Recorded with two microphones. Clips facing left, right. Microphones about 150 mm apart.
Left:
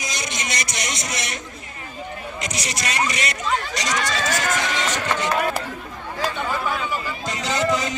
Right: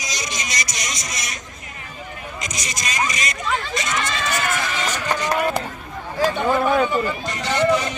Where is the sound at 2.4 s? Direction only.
70° left (ahead or behind).